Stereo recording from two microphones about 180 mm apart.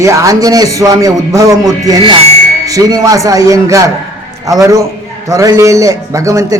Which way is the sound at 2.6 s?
20° right (ahead or behind).